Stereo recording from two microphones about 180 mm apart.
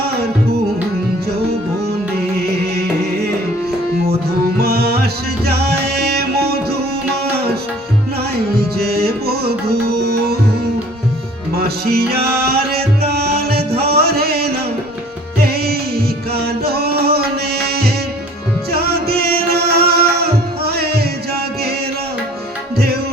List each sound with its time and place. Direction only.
4.6 s music: 60° right (ahead or behind)
6.1 s music: 60° right (ahead or behind)
8.8 s music: 60° right (ahead or behind)
11.5 s music: 60° right (ahead or behind)